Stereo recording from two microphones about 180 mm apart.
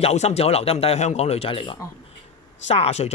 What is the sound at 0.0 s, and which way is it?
Speech, 35° left (ahead or behind).